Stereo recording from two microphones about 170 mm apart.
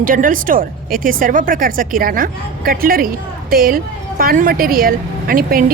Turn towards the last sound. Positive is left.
turn(degrees=-60)  # may be behind; listen again after turning